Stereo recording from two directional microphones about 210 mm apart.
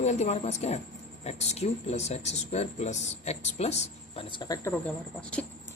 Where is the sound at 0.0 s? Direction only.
30° left (ahead or behind).